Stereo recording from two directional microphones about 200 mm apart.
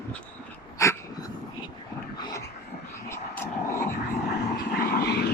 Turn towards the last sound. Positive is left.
turn(degrees=55)  # may be behind; listen again after turning